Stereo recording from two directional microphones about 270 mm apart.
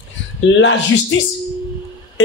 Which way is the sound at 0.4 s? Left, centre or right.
Left.